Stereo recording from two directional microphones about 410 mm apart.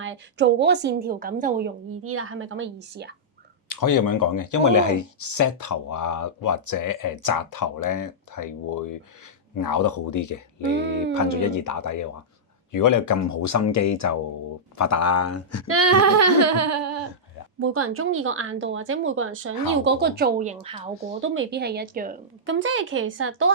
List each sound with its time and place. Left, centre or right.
0.0 s speech: right
1.9 s speech: right
3.7 s speech: left
15.6 s a sound: right
17.6 s speech: right; by 21.2 s centre
21.2 s speech: right